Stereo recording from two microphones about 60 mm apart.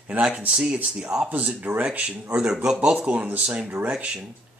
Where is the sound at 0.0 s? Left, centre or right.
Right.